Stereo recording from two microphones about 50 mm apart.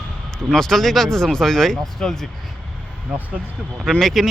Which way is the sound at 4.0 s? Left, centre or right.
Centre.